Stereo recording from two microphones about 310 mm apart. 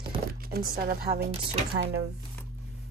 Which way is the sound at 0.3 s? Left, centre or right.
Right.